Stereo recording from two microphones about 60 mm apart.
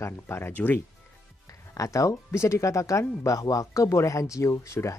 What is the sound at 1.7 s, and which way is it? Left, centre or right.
Speech, left.